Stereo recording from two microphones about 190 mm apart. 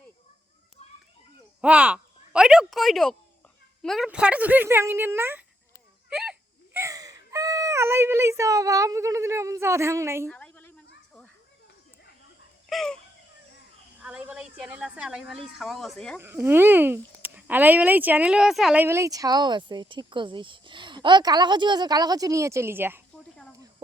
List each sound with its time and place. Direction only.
1.6 s speech: 5° right (ahead or behind)
6.7 s speech: 15° right (ahead or behind)
10.2 s a sound: 5° left (ahead or behind)
12.6 s chicken: centre (ahead or behind)
14.0 s a woman's voice: 5° right (ahead or behind)
16.1 s speech: 10° right (ahead or behind)
23.1 s a sound: 5° left (ahead or behind)